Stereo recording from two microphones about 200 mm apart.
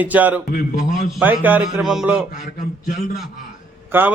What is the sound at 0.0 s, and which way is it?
A man's voice, 10° right (ahead or behind).